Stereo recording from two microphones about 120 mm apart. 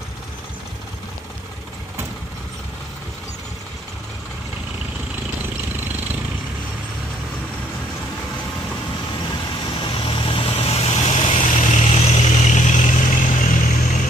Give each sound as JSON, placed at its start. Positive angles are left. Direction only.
{"t": 9.9, "sound": "vehicle", "side_deg": 50}
{"t": 11.3, "sound": "vehicle", "side_deg": 85}